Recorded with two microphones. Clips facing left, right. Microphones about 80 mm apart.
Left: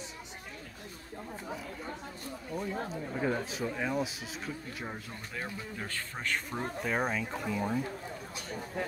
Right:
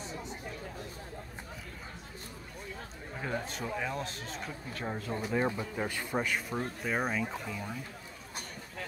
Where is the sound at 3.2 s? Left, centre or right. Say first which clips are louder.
Left 3 dB; centre.